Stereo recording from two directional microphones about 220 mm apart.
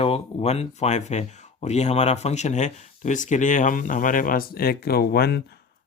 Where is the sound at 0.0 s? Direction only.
25° left (ahead or behind).